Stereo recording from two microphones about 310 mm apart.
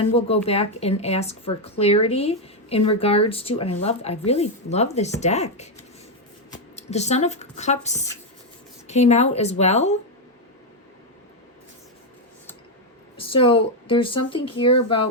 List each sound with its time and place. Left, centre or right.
0.0 s speech: centre
13.1 s speech: centre